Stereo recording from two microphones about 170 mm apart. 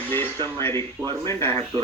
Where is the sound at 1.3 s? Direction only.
15° left (ahead or behind).